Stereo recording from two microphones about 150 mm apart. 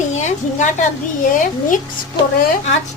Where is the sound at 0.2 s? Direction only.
55° left (ahead or behind).